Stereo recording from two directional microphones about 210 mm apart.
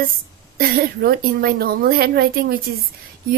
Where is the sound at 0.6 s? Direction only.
45° right (ahead or behind).